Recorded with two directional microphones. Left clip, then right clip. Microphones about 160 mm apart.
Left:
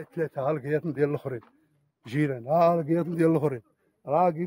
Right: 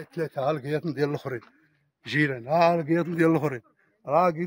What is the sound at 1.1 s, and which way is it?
A man's voice, 90° left.